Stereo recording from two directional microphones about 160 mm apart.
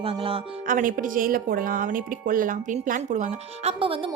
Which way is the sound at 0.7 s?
55° right (ahead or behind).